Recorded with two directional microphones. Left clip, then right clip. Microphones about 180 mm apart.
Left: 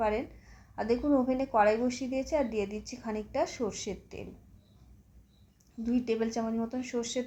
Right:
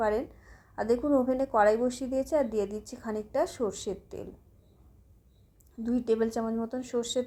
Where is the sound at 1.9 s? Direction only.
50° right (ahead or behind).